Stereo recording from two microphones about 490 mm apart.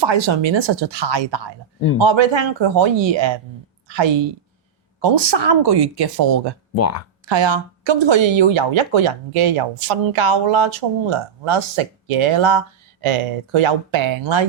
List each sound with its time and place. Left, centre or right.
0.0 s a woman's voice: right
6.7 s speech: left
7.3 s speech: right